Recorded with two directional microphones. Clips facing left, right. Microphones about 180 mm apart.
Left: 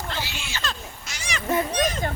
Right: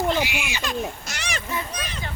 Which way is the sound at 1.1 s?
50° right (ahead or behind).